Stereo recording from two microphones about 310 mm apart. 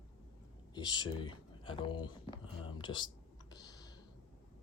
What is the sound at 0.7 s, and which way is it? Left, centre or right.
Speech, centre.